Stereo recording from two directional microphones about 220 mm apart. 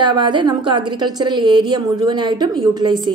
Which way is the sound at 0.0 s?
20° right (ahead or behind).